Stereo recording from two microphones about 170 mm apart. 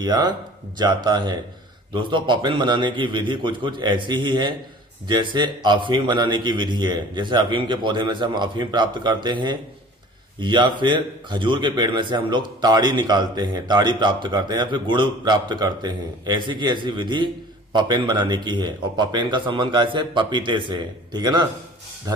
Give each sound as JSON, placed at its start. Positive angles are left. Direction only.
{"t": 0.0, "sound": "a man's voice", "side_deg": -25}